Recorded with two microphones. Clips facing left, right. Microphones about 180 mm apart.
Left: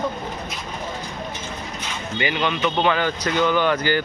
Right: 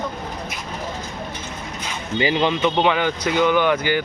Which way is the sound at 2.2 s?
30° right (ahead or behind).